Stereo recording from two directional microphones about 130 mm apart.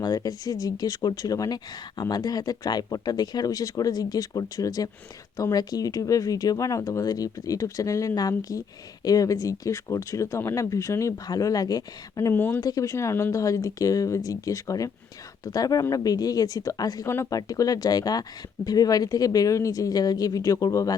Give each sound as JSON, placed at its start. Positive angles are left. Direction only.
{"t": 0.0, "sound": "speech", "side_deg": 30}